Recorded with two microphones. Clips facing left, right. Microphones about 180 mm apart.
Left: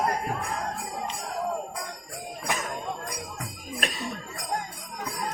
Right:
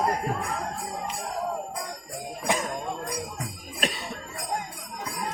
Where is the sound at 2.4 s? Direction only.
25° right (ahead or behind).